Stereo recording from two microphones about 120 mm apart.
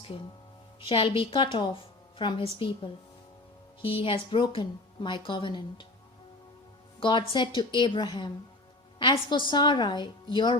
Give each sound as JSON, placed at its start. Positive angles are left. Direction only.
{"t": 0.9, "sound": "a woman's voice", "side_deg": 45}
{"t": 7.0, "sound": "a woman's voice", "side_deg": 40}